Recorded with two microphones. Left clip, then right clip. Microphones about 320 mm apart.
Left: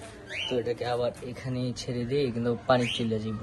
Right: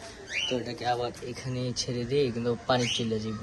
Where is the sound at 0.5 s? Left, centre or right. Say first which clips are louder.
Left 4 dB; centre.